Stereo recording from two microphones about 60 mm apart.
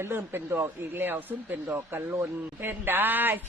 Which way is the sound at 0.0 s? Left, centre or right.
Right.